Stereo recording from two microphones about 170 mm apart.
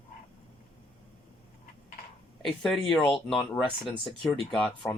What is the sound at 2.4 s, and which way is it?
Speech, 5° left (ahead or behind).